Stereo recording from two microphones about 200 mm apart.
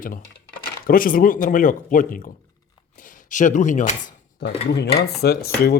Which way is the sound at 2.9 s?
40° left (ahead or behind).